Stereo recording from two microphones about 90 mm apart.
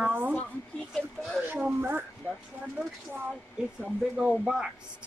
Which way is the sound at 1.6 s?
20° right (ahead or behind).